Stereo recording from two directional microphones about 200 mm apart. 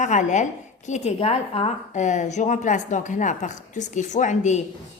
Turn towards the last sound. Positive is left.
turn(degrees=40)  # may be behind; listen again after turning